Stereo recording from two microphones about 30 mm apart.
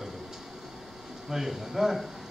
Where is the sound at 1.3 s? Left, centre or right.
Centre.